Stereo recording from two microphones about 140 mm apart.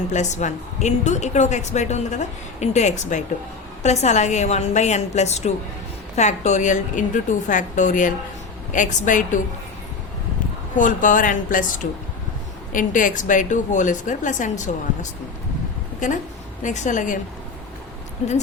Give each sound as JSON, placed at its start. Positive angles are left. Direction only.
{"t": 0.1, "sound": "a woman's voice", "side_deg": 55}
{"t": 10.8, "sound": "a woman's voice", "side_deg": 70}
{"t": 16.6, "sound": "a woman's voice", "side_deg": 65}